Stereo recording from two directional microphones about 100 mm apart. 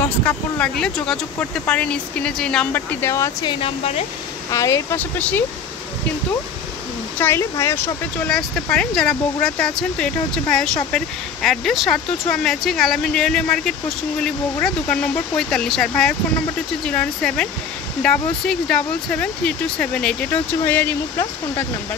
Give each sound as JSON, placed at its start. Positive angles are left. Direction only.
{"t": 0.2, "sound": "speech", "side_deg": 15}
{"t": 2.7, "sound": "speech", "side_deg": 20}
{"t": 3.4, "sound": "speech", "side_deg": 65}
{"t": 4.5, "sound": "speech", "side_deg": 30}
{"t": 4.9, "sound": "speech", "side_deg": 20}
{"t": 7.2, "sound": "speech", "side_deg": 25}
{"t": 8.3, "sound": "speech", "side_deg": 5}